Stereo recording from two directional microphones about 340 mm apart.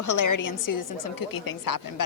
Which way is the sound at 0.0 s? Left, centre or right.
Left.